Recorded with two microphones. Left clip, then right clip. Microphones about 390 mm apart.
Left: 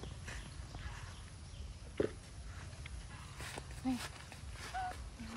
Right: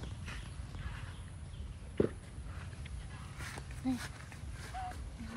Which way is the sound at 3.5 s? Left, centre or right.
Centre.